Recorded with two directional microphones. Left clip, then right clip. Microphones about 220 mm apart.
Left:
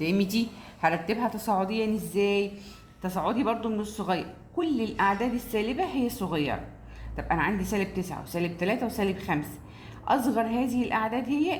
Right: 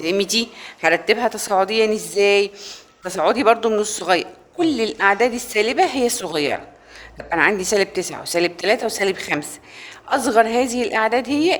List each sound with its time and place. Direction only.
0.0 s a woman's voice: 40° right (ahead or behind)